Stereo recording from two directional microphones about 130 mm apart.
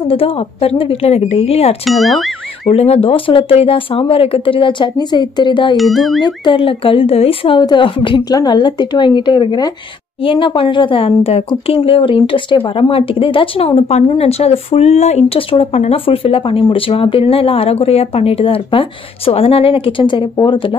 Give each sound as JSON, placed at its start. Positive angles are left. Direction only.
{"t": 0.0, "sound": "speech", "side_deg": 45}
{"t": 1.9, "sound": "speech", "side_deg": 0}
{"t": 2.7, "sound": "speech", "side_deg": 50}
{"t": 5.8, "sound": "speech", "side_deg": 0}
{"t": 6.2, "sound": "a woman's voice", "side_deg": 40}